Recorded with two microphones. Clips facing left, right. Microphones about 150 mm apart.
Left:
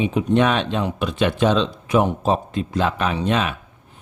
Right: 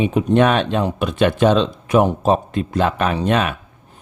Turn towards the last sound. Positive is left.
turn(degrees=-55)  # may be behind; listen again after turning